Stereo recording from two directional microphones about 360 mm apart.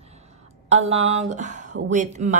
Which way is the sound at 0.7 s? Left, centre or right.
Centre.